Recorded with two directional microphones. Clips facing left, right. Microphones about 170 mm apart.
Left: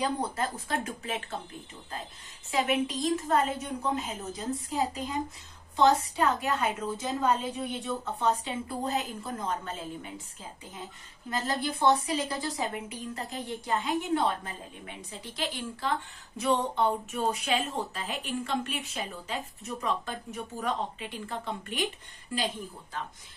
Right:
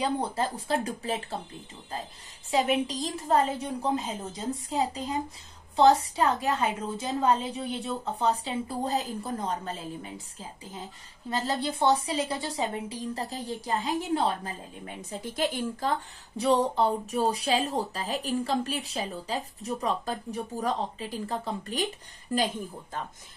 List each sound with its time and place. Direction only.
0.0 s speech: 30° right (ahead or behind)
2.5 s speech: 30° right (ahead or behind)
11.2 s speech: 30° right (ahead or behind)
15.0 s a woman's voice: 50° right (ahead or behind)
16.3 s speech: 35° right (ahead or behind)